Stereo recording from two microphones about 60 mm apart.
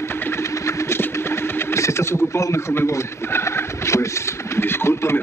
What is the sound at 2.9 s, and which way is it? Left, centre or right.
A man's voice, left.